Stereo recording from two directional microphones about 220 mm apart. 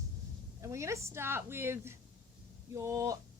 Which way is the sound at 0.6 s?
15° right (ahead or behind).